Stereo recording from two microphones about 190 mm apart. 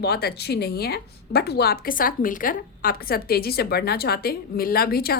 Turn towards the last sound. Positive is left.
turn(degrees=55)  # may be behind; listen again after turning